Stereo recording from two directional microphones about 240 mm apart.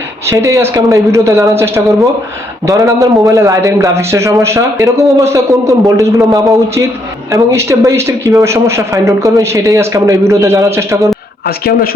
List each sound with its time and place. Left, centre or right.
0.3 s a man's voice: centre
11.4 s speech: left